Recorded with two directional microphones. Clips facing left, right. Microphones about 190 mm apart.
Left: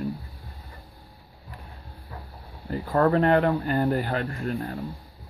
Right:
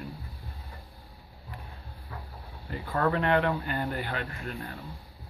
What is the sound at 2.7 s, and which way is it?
Speech, 40° left (ahead or behind).